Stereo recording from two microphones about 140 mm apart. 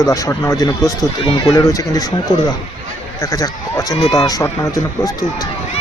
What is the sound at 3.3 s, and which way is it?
Speech, 25° left (ahead or behind).